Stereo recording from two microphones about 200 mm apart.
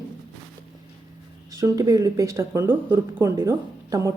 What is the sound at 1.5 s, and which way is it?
A woman's voice, 15° right (ahead or behind).